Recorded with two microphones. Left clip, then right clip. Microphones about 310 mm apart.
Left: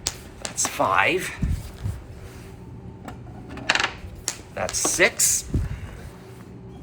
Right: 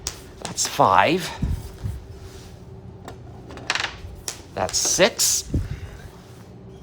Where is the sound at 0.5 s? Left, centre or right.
Centre.